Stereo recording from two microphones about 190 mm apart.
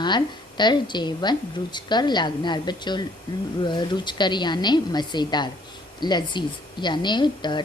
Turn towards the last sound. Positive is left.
turn(degrees=25)  # may be behind; listen again after turning